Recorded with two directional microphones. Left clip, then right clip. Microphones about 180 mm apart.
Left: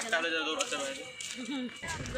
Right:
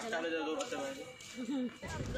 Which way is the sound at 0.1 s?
30° right (ahead or behind).